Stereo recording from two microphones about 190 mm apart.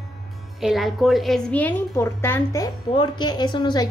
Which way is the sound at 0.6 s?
Centre (ahead or behind).